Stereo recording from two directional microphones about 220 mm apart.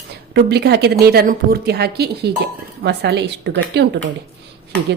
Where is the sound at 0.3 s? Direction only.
50° right (ahead or behind).